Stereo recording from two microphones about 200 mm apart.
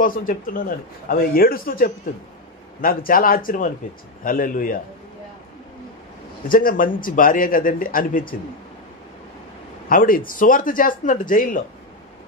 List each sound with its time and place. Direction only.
0.0 s a man's voice: 45° left (ahead or behind)
6.5 s a man's voice: 45° left (ahead or behind)
9.8 s a man's voice: 45° left (ahead or behind)